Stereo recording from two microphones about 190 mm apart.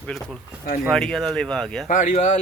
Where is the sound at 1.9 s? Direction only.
40° left (ahead or behind).